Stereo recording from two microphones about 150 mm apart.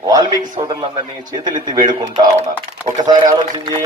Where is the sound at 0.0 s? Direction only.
25° right (ahead or behind).